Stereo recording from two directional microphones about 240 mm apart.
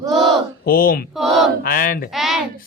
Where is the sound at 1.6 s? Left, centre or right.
Left.